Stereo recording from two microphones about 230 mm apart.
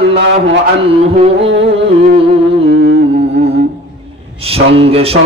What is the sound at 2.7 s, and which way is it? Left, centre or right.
Carnatic music, right.